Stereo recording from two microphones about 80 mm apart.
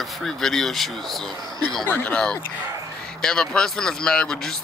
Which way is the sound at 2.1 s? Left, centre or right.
Centre.